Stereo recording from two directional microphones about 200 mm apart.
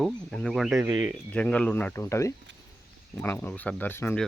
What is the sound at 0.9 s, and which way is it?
Speech, 20° right (ahead or behind).